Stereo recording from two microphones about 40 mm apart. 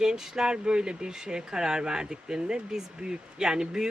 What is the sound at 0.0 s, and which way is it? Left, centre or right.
Speech, centre.